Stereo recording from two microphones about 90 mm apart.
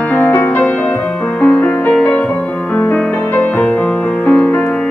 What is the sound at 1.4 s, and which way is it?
Music, 15° left (ahead or behind).